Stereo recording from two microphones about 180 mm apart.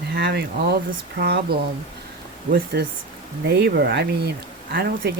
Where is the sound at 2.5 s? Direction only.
60° right (ahead or behind).